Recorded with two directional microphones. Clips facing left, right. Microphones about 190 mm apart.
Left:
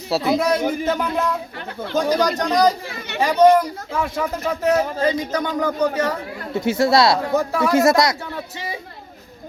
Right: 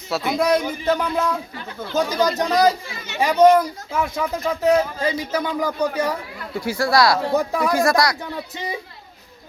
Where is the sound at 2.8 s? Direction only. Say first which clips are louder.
Left 3 dB; 60° left (ahead or behind).